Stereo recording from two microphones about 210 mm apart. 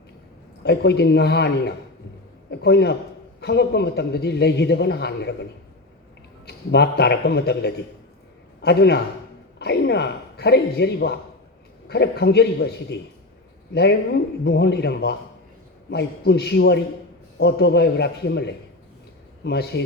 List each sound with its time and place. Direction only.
0.6 s a man's voice: 55° left (ahead or behind)
14.4 s a man's voice: 50° left (ahead or behind)